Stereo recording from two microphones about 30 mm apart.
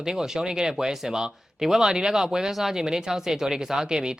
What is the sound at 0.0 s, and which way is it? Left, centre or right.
Speech, centre.